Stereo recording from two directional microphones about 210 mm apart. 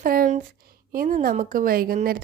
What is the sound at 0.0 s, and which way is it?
A woman's voice, 45° right (ahead or behind).